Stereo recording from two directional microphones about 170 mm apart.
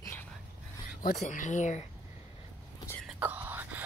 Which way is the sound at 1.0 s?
45° left (ahead or behind).